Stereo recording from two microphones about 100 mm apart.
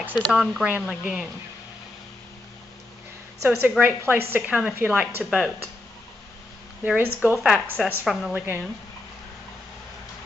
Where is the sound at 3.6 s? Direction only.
20° right (ahead or behind).